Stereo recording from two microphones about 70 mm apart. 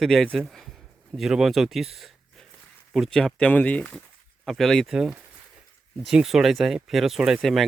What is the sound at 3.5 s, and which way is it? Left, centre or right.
Speech, left.